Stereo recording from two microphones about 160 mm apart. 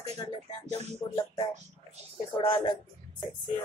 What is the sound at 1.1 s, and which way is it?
Speech, 35° left (ahead or behind).